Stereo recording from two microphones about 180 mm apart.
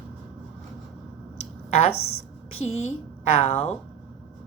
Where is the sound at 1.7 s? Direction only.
35° left (ahead or behind).